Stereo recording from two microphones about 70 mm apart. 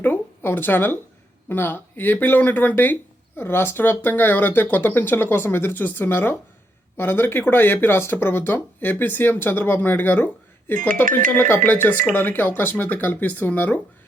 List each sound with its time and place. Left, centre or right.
0.0 s speech: left